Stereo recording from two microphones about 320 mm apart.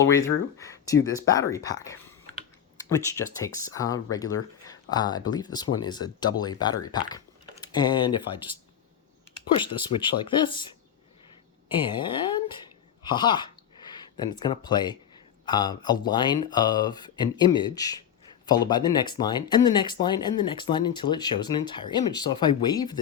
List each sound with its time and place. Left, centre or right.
0.6 s speech: centre
9.6 s speech: centre
11.9 s speech: centre